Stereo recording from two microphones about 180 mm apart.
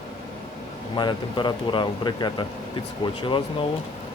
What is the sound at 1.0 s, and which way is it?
Speech, 25° left (ahead or behind).